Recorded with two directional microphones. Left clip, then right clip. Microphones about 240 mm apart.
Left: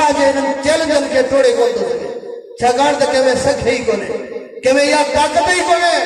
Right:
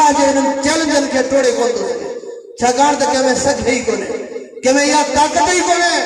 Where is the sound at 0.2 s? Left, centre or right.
Right.